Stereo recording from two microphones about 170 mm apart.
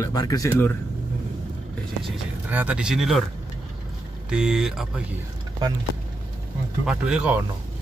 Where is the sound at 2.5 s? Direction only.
10° right (ahead or behind).